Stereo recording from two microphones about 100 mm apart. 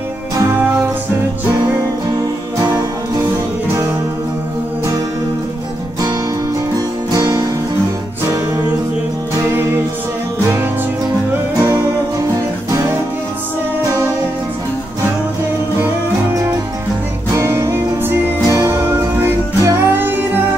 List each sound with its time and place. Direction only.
2.6 s music: 40° right (ahead or behind)
7.1 s music: 40° right (ahead or behind)
9.4 s music: 25° right (ahead or behind)
13.8 s music: 35° right (ahead or behind)
17.3 s music: 30° right (ahead or behind)